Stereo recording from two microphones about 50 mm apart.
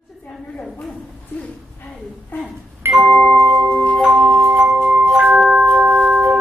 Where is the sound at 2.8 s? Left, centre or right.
Right.